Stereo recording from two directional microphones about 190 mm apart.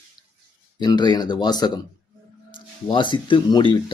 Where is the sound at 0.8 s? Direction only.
20° left (ahead or behind).